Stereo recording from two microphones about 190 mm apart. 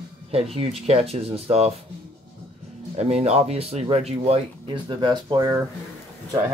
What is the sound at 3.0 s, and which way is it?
Speech, 35° right (ahead or behind).